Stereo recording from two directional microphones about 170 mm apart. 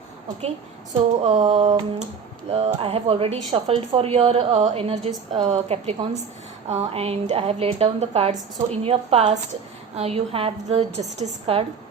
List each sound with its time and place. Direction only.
1.2 s speech: 40° right (ahead or behind)